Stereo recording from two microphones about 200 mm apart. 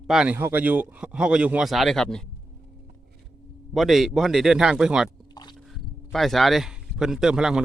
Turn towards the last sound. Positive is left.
turn(degrees=-5)  # may be behind; listen again after turning